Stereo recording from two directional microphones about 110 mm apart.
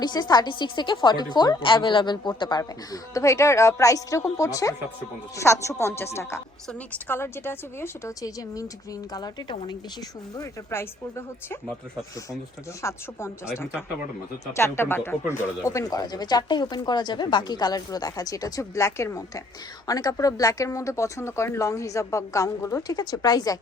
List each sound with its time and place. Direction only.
0.0 s speech: 40° left (ahead or behind); by 6.1 s 20° left (ahead or behind)
7.1 s speech: 20° left (ahead or behind)
8.2 s speech: 30° left (ahead or behind)
10.3 s speech: 25° left (ahead or behind)
12.8 s speech: 25° left (ahead or behind)
14.5 s speech: 25° left (ahead or behind)